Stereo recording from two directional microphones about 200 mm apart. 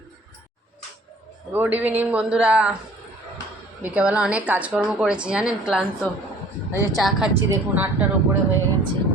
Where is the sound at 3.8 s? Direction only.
5° right (ahead or behind).